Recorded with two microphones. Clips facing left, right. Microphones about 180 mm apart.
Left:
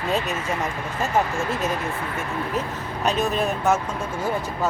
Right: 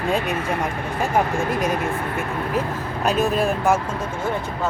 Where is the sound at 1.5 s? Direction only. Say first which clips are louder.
Right 3 dB; 10° right (ahead or behind).